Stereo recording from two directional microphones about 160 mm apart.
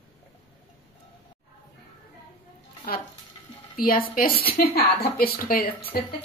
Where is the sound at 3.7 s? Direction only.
65° left (ahead or behind).